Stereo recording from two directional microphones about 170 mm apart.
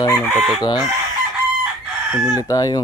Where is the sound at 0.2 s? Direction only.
Centre (ahead or behind).